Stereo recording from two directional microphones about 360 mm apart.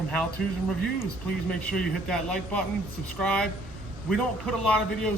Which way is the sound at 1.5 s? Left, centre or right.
Centre.